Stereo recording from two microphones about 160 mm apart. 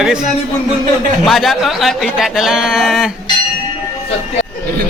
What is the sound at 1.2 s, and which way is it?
Speech, centre (ahead or behind).